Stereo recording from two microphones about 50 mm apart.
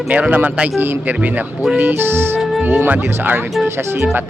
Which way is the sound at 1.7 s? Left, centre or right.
Right.